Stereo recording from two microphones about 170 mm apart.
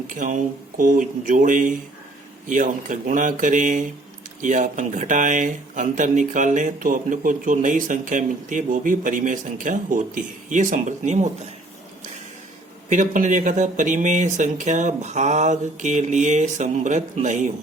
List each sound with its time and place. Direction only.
0.1 s speech: 50° right (ahead or behind)
12.9 s speech: 50° right (ahead or behind)